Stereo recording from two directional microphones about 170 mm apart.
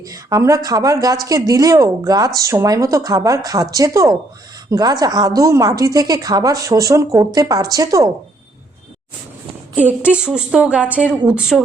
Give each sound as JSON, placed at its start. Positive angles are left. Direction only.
{"t": 0.0, "sound": "speech", "side_deg": -20}
{"t": 10.1, "sound": "speech", "side_deg": -5}